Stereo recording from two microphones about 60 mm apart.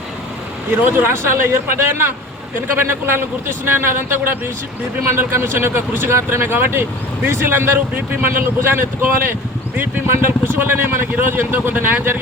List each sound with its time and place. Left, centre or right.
0.7 s a man's voice: right
1.1 s a man's voice: right